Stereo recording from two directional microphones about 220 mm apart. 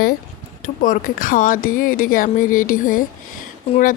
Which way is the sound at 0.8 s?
35° left (ahead or behind).